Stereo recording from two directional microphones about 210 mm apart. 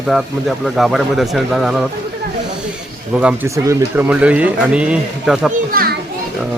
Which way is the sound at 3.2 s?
10° right (ahead or behind).